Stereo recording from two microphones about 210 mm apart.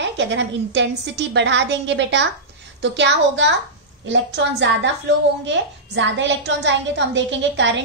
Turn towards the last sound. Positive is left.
turn(degrees=-60)  # may be behind; listen again after turning